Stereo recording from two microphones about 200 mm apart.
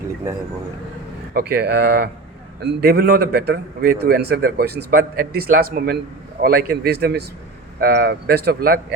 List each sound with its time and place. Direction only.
1.3 s a man's voice: 50° right (ahead or behind)